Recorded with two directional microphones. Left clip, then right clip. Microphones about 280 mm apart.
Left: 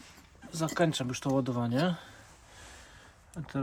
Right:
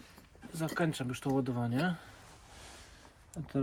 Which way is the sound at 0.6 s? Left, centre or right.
Centre.